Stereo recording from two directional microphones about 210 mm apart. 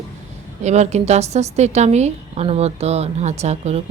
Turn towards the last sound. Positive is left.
turn(degrees=-30)  # may be behind; listen again after turning